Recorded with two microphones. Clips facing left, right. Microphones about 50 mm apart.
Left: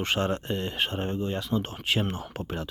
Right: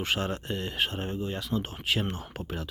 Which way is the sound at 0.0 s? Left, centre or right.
Centre.